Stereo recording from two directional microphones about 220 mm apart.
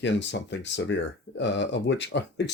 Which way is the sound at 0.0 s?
55° left (ahead or behind).